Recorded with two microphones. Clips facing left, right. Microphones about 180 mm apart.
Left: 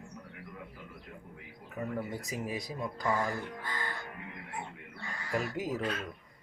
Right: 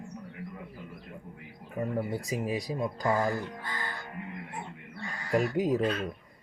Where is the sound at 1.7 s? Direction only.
30° right (ahead or behind).